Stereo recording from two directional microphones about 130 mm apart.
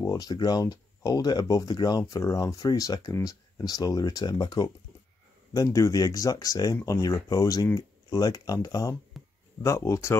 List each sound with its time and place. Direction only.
0.0 s speech: 30° left (ahead or behind)
9.1 s a sound: centre (ahead or behind)
9.6 s speech: 20° left (ahead or behind)